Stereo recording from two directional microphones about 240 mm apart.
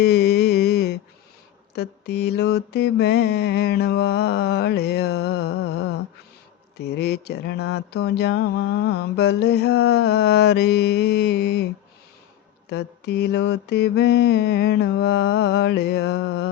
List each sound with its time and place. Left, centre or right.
0.0 s a sound: left
1.7 s mantra: left
6.7 s mantra: left
12.6 s mantra: left